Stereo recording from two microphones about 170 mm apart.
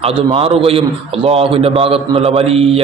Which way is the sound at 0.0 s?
30° right (ahead or behind).